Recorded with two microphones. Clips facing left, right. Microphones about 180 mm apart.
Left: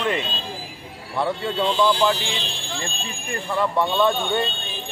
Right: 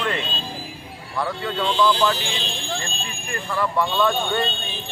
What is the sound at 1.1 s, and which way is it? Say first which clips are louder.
Speech: left 2 dB; 25° left (ahead or behind).